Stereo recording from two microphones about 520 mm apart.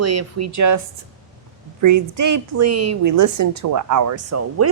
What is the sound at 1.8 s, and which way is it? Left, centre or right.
A woman's voice, right.